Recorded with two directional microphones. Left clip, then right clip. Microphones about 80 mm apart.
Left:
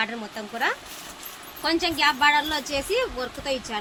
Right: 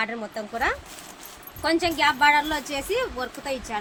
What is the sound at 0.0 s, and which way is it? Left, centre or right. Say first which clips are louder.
A woman's voice: even; right.